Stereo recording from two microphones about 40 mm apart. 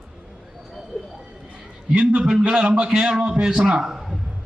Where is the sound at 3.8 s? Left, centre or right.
Centre.